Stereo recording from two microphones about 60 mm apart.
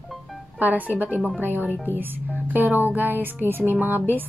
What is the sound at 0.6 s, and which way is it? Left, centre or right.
Speech, right.